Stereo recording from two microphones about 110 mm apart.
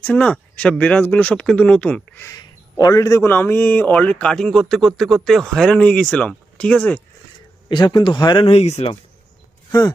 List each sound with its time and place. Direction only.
0.0 s a man's voice: 10° left (ahead or behind)
2.3 s a man's voice: 35° left (ahead or behind); by 7.0 s 10° left (ahead or behind)
7.7 s speech: 40° left (ahead or behind)
8.4 s speech: 75° left (ahead or behind)